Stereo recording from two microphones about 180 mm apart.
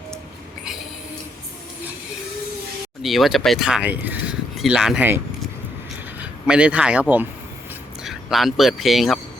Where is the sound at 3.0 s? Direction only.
Centre (ahead or behind).